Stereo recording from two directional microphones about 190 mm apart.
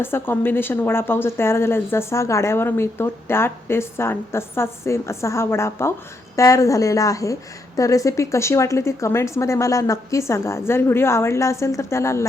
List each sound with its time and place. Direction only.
0.0 s a woman's voice: 10° left (ahead or behind)